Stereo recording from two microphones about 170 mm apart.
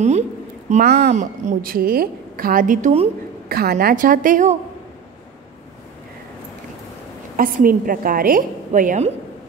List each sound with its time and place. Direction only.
0.8 s speech: 70° right (ahead or behind)
1.1 s a woman's voice: 45° right (ahead or behind)
3.4 s a woman's voice: 60° right (ahead or behind)
7.3 s a woman's voice: 55° right (ahead or behind)